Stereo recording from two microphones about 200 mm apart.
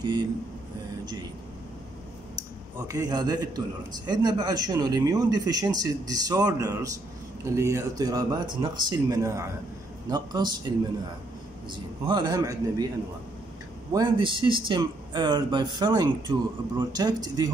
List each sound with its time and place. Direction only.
0.0 s speech: 20° right (ahead or behind)
2.9 s speech: 20° right (ahead or behind)
12.1 s speech: 20° right (ahead or behind)
13.9 s speech: 25° right (ahead or behind)